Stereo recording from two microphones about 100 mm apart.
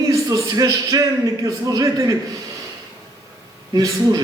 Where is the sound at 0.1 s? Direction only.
35° right (ahead or behind).